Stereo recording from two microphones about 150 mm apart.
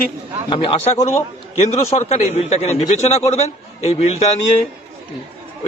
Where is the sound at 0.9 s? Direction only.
45° left (ahead or behind).